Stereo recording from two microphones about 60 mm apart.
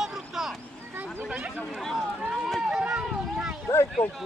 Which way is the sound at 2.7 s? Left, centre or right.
Centre.